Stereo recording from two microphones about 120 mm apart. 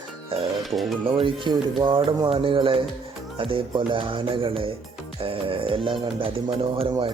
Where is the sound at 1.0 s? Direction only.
45° right (ahead or behind).